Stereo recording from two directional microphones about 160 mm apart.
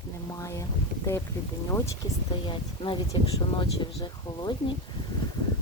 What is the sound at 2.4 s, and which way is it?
Speech, 30° left (ahead or behind).